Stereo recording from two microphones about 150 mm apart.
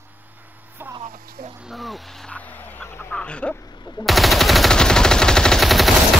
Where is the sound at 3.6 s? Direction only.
30° left (ahead or behind).